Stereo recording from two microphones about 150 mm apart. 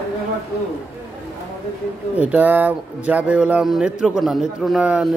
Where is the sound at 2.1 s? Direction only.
10° right (ahead or behind).